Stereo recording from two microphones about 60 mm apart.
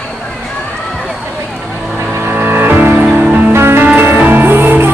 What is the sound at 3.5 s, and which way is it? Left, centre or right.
Music, right.